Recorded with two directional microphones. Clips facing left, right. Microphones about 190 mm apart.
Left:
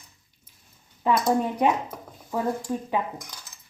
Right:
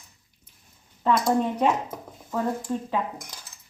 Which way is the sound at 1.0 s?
10° left (ahead or behind).